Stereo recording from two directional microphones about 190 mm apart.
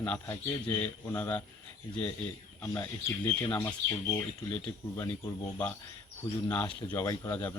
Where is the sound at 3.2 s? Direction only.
10° left (ahead or behind).